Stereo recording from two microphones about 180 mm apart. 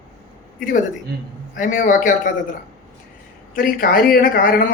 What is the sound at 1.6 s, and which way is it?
Speech, 50° left (ahead or behind).